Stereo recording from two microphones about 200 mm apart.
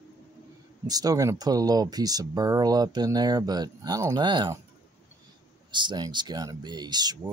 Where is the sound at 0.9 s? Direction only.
20° right (ahead or behind).